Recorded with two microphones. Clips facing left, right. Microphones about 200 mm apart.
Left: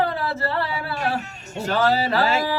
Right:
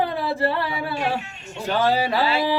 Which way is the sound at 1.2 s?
40° left (ahead or behind).